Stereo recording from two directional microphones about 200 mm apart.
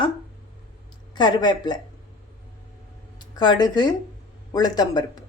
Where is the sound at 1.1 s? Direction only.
20° left (ahead or behind).